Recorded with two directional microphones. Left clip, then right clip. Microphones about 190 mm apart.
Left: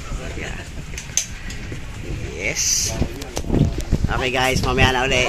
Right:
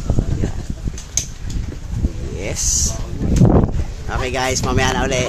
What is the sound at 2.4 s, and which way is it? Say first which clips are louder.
Speech: even; 20° right (ahead or behind).